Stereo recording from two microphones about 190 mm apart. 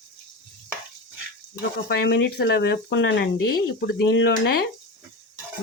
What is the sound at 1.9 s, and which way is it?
Speech, 60° left (ahead or behind).